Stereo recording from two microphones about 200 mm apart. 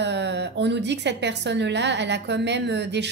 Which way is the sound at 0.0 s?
60° right (ahead or behind).